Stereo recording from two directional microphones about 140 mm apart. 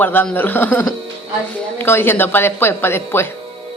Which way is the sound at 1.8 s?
15° left (ahead or behind).